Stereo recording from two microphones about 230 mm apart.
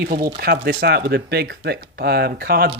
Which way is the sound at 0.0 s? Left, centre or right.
Right.